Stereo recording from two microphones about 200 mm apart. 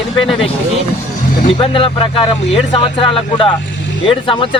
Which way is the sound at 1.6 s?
25° left (ahead or behind).